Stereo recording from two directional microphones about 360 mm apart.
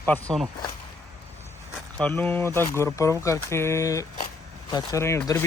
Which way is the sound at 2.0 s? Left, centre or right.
Centre.